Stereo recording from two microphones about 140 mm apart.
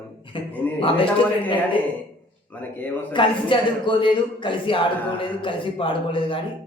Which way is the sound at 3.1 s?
35° left (ahead or behind).